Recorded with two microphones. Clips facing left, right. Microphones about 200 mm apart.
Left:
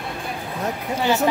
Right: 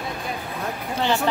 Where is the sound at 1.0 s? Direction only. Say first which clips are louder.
Left 3 dB; 10° left (ahead or behind).